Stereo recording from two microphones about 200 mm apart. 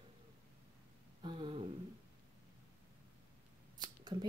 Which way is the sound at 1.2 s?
25° right (ahead or behind).